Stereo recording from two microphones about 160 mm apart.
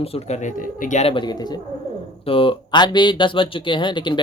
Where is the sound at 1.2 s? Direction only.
25° left (ahead or behind).